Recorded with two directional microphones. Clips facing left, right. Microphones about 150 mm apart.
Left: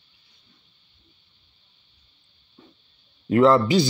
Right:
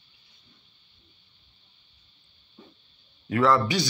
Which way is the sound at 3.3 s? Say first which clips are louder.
Left 6 dB; 25° left (ahead or behind).